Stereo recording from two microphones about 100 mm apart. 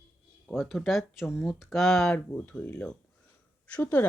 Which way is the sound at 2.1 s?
15° left (ahead or behind).